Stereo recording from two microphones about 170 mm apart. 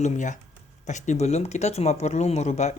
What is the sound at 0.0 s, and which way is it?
Speech, 45° left (ahead or behind).